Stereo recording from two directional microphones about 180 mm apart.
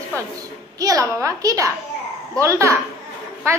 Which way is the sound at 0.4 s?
20° right (ahead or behind).